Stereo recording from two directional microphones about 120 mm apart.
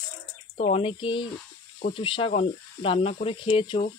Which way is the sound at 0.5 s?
65° left (ahead or behind).